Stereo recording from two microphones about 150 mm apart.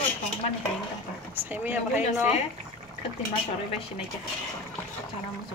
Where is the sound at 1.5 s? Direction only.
10° right (ahead or behind).